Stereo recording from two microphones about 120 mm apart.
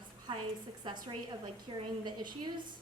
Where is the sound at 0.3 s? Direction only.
45° right (ahead or behind).